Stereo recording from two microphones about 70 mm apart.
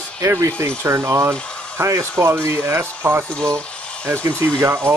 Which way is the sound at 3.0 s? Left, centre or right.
Right.